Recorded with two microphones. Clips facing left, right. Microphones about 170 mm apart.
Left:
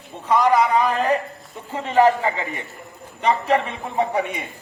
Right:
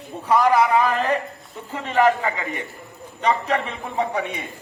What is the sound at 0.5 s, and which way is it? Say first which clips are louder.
Speech: even; centre (ahead or behind).